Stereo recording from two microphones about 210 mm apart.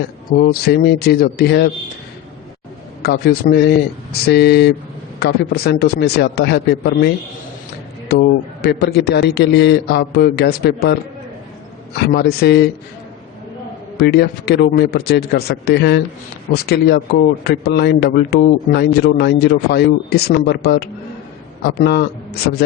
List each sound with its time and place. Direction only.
0.3 s speech: 45° left (ahead or behind)
3.0 s speech: 50° left (ahead or behind)
8.1 s speech: 50° left (ahead or behind)
11.9 s speech: 50° left (ahead or behind)
13.9 s speech: 50° left (ahead or behind)